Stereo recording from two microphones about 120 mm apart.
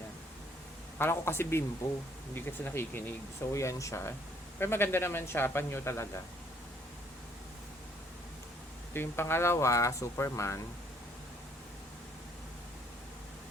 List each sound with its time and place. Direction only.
0.9 s speech: 20° left (ahead or behind)
8.9 s speech: 20° left (ahead or behind)